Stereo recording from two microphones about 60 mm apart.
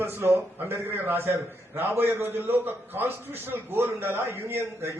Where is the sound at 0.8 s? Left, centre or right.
Right.